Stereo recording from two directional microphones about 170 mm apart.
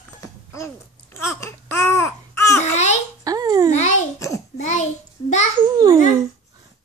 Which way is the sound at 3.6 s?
45° left (ahead or behind).